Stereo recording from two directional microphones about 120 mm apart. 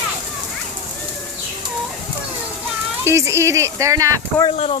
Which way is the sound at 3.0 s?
25° right (ahead or behind).